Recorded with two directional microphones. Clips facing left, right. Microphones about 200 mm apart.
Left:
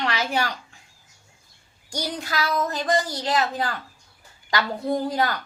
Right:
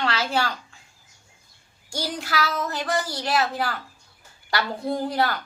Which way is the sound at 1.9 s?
20° left (ahead or behind).